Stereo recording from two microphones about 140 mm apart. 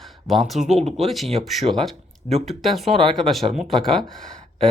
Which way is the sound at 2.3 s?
45° right (ahead or behind).